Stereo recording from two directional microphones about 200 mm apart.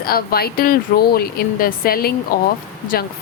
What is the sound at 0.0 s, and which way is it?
Speech, 50° left (ahead or behind).